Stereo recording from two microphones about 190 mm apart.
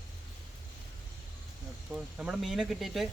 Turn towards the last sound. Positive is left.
turn(degrees=0)  # may be behind; listen again after turning